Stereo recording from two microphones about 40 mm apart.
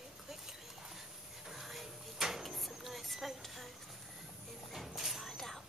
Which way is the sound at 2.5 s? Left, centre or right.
Centre.